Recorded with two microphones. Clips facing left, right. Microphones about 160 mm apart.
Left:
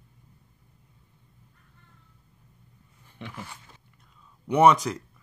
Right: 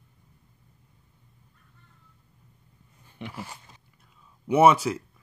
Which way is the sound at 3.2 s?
10° right (ahead or behind).